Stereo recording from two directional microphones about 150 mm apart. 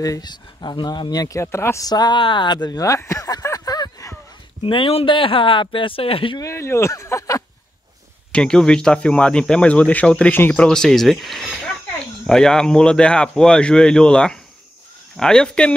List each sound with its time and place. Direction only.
0.0 s speech: 25° left (ahead or behind)
4.6 s speech: 35° left (ahead or behind)
6.4 s speech: 20° left (ahead or behind)
8.3 s speech: 5° left (ahead or behind)